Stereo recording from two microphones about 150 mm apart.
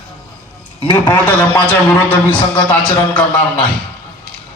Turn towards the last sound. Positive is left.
turn(degrees=5)  # may be behind; listen again after turning